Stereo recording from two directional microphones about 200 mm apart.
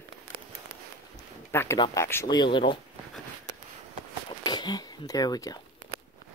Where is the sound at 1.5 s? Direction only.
15° left (ahead or behind).